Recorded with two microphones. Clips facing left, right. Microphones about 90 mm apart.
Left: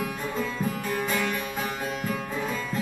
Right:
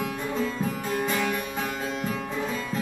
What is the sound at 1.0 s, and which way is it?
Music, 15° right (ahead or behind).